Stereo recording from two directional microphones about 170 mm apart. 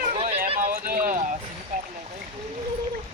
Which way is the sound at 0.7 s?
55° right (ahead or behind).